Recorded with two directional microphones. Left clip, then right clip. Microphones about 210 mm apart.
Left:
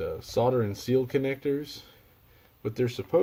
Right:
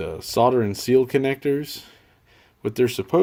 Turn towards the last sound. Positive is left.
turn(degrees=-40)  # may be behind; listen again after turning